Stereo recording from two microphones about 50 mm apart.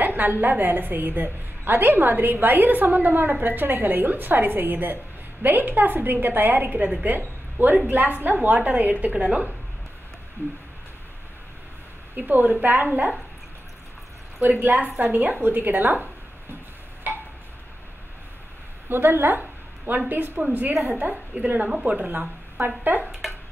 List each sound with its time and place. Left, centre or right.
0.0 s a woman's voice: right
12.2 s a woman's voice: right
14.4 s a woman's voice: right
17.1 s tick-tock: right
18.9 s a woman's voice: right